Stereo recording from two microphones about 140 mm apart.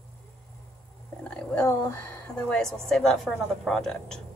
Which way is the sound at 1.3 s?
15° left (ahead or behind).